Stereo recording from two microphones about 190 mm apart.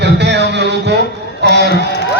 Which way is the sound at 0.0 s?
65° right (ahead or behind).